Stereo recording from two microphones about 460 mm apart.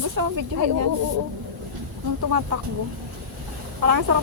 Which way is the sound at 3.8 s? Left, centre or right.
Right.